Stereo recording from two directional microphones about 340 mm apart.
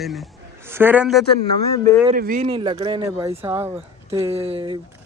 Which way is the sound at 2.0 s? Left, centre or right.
Right.